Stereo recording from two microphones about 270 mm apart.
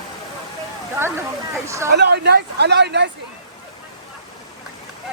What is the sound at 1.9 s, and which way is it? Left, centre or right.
Speech, right.